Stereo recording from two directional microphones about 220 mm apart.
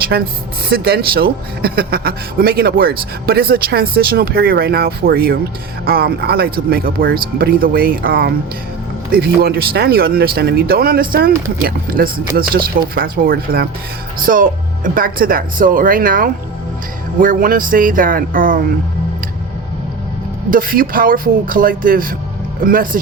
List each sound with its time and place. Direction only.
0.7 s speech: 45° right (ahead or behind)
20.5 s speech: 40° right (ahead or behind)